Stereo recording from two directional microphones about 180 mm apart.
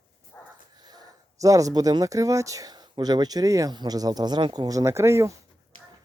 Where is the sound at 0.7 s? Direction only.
20° right (ahead or behind).